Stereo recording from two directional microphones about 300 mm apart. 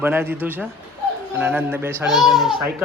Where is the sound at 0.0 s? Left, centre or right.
Centre.